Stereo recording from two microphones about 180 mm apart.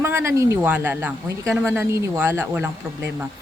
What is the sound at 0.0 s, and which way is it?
Speech, 15° right (ahead or behind).